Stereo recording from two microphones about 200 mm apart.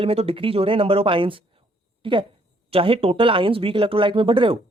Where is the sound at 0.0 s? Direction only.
30° right (ahead or behind).